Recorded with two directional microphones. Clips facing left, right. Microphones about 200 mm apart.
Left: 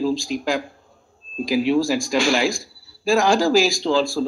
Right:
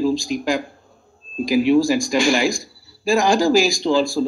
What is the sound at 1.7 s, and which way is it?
Speech, 5° left (ahead or behind).